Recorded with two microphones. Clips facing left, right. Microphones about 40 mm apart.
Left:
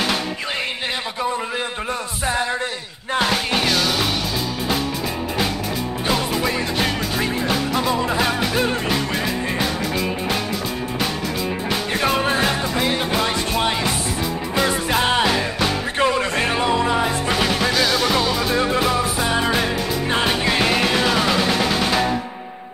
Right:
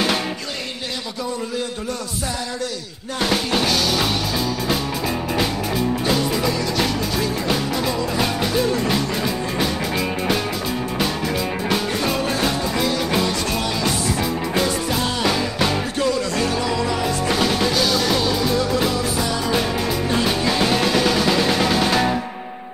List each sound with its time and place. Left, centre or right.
3.3 s music: centre
6.0 s music: left
9.6 s music: centre
12.0 s music: left
17.3 s music: centre
18.5 s music: left; by 22.1 s centre